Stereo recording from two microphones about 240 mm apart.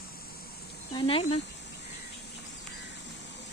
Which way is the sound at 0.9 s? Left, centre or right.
Left.